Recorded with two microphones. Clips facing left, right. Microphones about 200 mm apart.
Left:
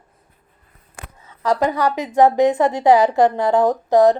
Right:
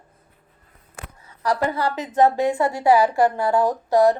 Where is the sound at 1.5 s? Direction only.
15° left (ahead or behind).